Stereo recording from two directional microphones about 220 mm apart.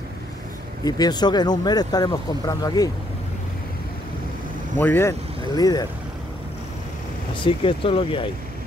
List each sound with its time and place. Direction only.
0.8 s speech: 15° left (ahead or behind)
4.7 s speech: 10° left (ahead or behind)
7.3 s speech: 25° left (ahead or behind)